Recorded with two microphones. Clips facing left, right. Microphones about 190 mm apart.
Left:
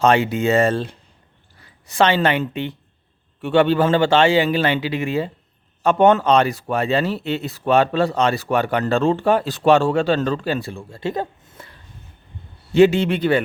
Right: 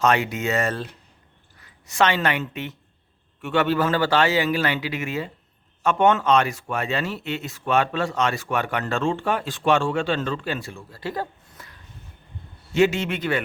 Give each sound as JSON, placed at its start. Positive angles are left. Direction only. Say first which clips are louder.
{"t": 0.0, "sound": "a man's voice", "louder": "left 5 dB", "side_deg": 30}
{"t": 12.7, "sound": "speech", "louder": "left 6 dB", "side_deg": 30}